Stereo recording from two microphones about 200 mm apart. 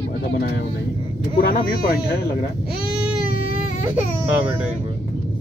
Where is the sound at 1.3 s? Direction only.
45° left (ahead or behind).